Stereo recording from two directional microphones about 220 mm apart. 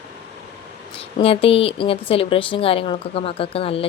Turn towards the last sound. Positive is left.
turn(degrees=25)  # may be behind; listen again after turning